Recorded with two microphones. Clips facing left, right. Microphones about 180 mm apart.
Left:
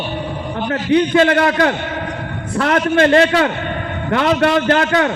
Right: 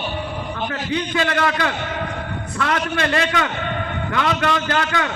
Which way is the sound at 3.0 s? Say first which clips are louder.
Left 11 dB; 35° left (ahead or behind).